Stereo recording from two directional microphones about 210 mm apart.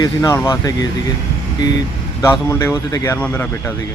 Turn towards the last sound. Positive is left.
turn(degrees=10)  # may be behind; listen again after turning